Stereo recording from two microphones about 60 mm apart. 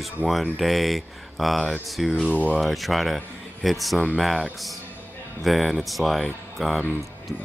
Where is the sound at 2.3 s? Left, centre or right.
Right.